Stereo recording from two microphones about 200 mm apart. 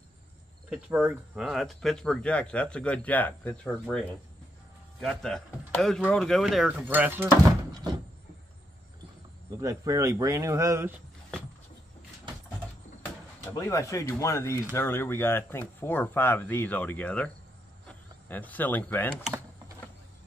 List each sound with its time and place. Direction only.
0.7 s speech: 5° right (ahead or behind)
5.0 s speech: centre (ahead or behind)
9.6 s speech: 15° right (ahead or behind)
13.6 s speech: 15° left (ahead or behind)